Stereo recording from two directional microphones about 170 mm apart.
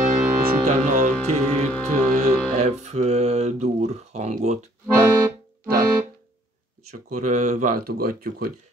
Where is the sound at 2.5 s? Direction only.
40° right (ahead or behind).